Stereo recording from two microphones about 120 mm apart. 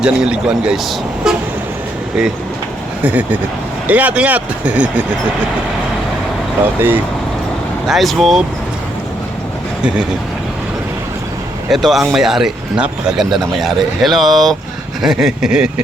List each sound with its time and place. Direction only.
0.0 s speech: 5° right (ahead or behind)
3.0 s speech: 10° right (ahead or behind)
6.7 s speech: 20° right (ahead or behind)
7.9 s speech: centre (ahead or behind)
11.7 s speech: centre (ahead or behind)